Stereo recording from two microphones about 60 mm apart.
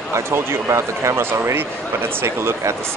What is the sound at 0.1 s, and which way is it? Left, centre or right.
Speech, right.